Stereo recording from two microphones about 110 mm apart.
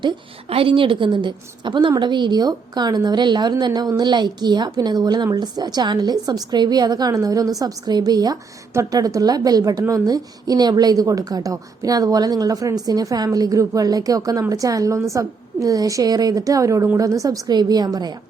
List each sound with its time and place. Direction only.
0.5 s a woman's voice: 55° right (ahead or behind); by 18.1 s 35° right (ahead or behind)